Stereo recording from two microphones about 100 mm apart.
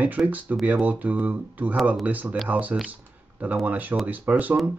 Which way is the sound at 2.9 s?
15° right (ahead or behind).